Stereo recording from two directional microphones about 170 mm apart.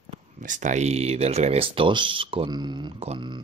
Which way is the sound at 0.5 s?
45° right (ahead or behind).